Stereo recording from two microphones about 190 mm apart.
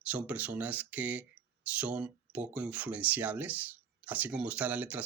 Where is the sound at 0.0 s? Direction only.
5° right (ahead or behind).